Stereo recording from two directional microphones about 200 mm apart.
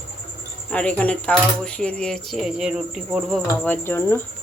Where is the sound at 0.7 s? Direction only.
5° left (ahead or behind).